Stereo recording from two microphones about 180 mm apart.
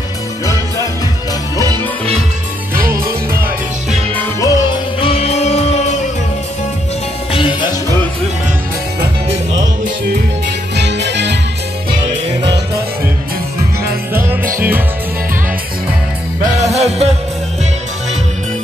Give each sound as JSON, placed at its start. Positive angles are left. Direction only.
{"t": 4.1, "sound": "music", "side_deg": 15}
{"t": 5.0, "sound": "music", "side_deg": 35}
{"t": 10.8, "sound": "music", "side_deg": -75}
{"t": 16.5, "sound": "music", "side_deg": -35}